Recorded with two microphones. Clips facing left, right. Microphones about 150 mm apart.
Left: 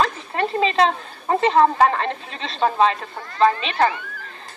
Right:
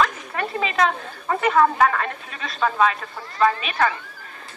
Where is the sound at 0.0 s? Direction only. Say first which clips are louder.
Left 2 dB; 30° left (ahead or behind).